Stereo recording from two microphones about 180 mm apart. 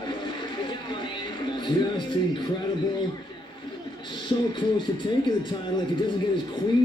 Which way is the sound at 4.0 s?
25° left (ahead or behind).